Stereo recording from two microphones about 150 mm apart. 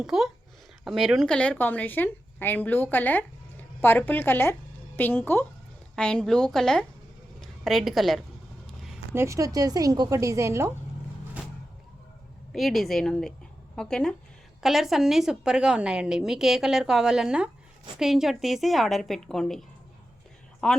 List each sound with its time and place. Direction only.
0.0 s a woman's voice: centre (ahead or behind)
8.6 s a sound: centre (ahead or behind)
9.1 s a woman's voice: 20° right (ahead or behind)
12.5 s a woman's voice: centre (ahead or behind)